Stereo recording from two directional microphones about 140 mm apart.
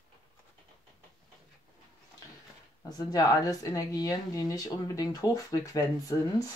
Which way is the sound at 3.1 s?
25° left (ahead or behind).